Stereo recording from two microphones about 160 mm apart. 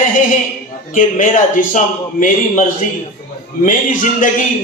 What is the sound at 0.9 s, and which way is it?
Speech, 55° left (ahead or behind).